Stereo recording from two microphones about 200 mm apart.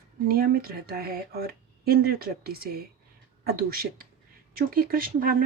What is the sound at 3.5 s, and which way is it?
Speech, 50° right (ahead or behind).